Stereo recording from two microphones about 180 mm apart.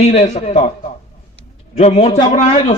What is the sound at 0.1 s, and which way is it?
Speech, 35° left (ahead or behind).